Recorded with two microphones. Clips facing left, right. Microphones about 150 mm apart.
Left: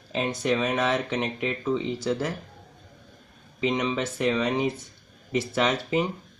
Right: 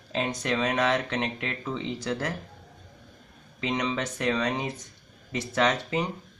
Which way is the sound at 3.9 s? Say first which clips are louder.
Left 2 dB; 15° left (ahead or behind).